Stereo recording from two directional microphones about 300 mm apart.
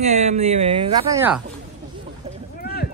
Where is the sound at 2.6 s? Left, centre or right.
Left.